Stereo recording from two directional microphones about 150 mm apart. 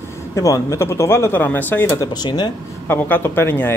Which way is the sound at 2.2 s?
30° left (ahead or behind).